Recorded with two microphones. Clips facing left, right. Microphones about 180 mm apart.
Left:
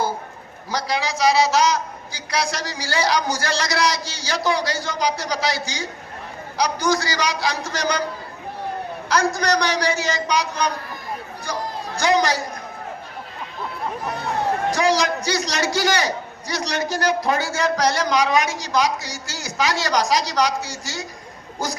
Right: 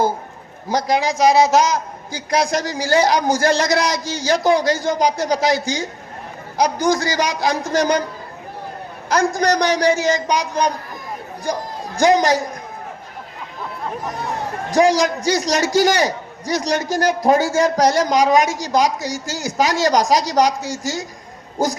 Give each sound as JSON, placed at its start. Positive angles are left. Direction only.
{"t": 0.7, "sound": "a man's voice", "side_deg": -50}
{"t": 9.0, "sound": "a man's voice", "side_deg": -50}
{"t": 11.9, "sound": "a man's voice", "side_deg": -45}
{"t": 14.8, "sound": "a man's voice", "side_deg": -45}